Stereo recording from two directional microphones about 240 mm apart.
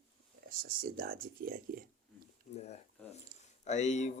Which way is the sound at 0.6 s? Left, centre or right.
Right.